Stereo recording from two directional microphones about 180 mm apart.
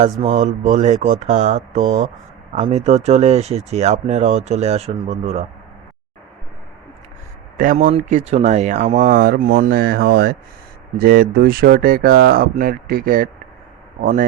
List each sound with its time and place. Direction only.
0.0 s speech: 35° right (ahead or behind)
7.5 s speech: 50° right (ahead or behind)